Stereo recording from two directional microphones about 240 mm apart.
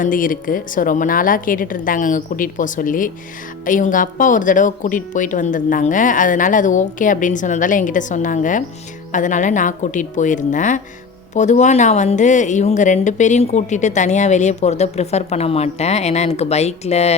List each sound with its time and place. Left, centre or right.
0.0 s a woman's voice: left